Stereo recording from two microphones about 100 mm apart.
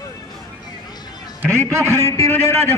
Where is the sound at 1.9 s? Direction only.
30° left (ahead or behind).